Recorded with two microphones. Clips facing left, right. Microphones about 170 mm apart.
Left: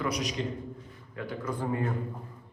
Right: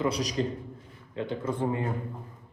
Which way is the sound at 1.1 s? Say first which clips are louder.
Right 4 dB; 25° right (ahead or behind).